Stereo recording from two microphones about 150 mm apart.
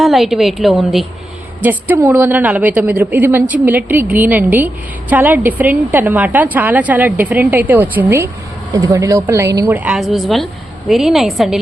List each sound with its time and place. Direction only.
0.0 s a woman's voice: centre (ahead or behind)
1.6 s a woman's voice: 15° right (ahead or behind)
9.7 s a woman's voice: 5° right (ahead or behind)